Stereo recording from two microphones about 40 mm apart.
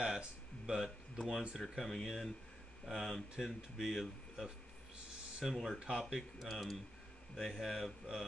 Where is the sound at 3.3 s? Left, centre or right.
Centre.